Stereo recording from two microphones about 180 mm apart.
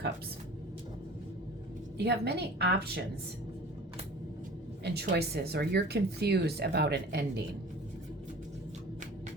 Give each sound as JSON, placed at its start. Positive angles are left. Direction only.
{"t": 2.0, "sound": "a woman's voice", "side_deg": -65}
{"t": 4.8, "sound": "a woman's voice", "side_deg": -65}